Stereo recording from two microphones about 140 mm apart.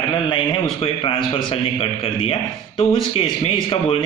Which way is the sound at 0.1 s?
35° left (ahead or behind).